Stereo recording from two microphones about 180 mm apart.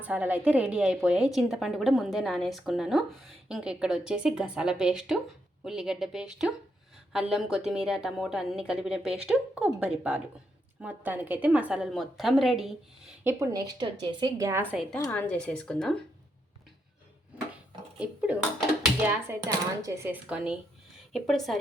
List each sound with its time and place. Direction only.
0.0 s a woman's voice: 10° right (ahead or behind)
13.2 s a woman's voice: 20° right (ahead or behind)
14.9 s a woman's voice: 15° left (ahead or behind)
18.0 s a woman's voice: 5° right (ahead or behind)